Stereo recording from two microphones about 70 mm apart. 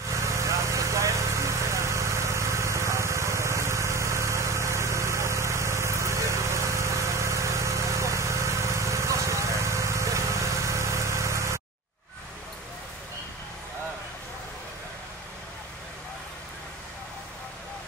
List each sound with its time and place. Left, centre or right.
0.1 s vehicle: right